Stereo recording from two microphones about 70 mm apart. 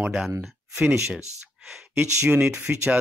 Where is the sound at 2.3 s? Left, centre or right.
Right.